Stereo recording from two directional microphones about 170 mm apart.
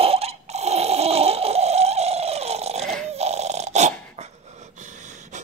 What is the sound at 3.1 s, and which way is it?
Dog, 40° right (ahead or behind).